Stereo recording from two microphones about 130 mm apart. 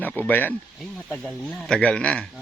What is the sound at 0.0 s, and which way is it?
Speech, 15° left (ahead or behind).